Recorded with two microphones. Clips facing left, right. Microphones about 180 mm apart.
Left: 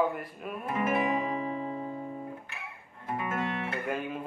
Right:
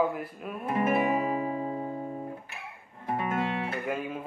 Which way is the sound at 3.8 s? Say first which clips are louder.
Right 1 dB; centre (ahead or behind).